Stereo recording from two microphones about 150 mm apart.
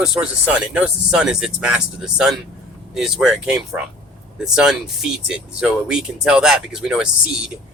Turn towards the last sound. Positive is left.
turn(degrees=-5)  # may be behind; listen again after turning